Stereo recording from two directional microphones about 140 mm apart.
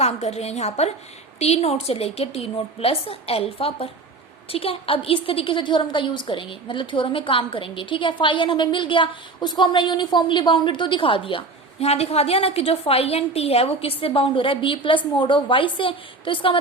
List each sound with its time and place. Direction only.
0.0 s a woman's voice: 50° left (ahead or behind)